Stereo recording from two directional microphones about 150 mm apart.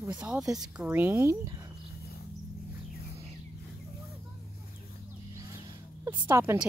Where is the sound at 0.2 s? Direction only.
5° right (ahead or behind).